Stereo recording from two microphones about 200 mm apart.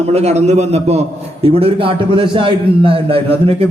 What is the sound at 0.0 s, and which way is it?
A man's voice, 30° right (ahead or behind).